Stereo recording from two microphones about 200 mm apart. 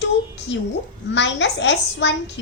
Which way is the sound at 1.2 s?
60° left (ahead or behind).